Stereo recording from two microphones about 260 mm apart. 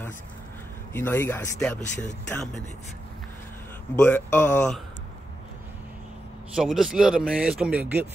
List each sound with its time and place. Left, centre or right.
0.9 s speech: centre
4.0 s speech: centre
6.5 s speech: centre